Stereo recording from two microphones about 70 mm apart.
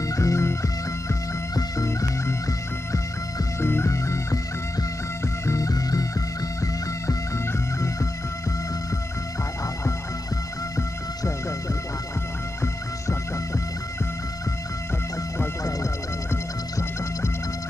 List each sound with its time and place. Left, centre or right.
0.0 s music: left
3.6 s music: left
5.5 s music: left